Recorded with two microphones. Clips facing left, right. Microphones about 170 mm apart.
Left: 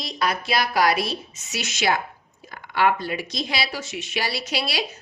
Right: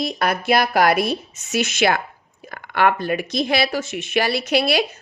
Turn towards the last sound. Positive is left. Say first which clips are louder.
# right 8 dB
turn(degrees=-55)  # may be behind; listen again after turning